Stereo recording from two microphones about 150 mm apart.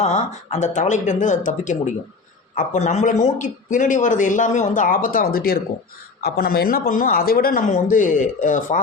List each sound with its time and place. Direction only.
0.0 s a man's voice: 50° left (ahead or behind); by 7.6 s 80° left
7.7 s a man's voice: 60° left (ahead or behind)